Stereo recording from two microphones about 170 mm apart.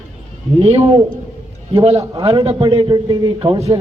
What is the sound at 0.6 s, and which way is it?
A man's voice, 35° right (ahead or behind).